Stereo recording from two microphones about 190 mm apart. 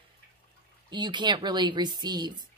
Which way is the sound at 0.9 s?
25° right (ahead or behind).